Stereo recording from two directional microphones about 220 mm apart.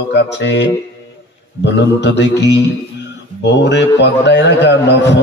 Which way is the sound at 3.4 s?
50° left (ahead or behind).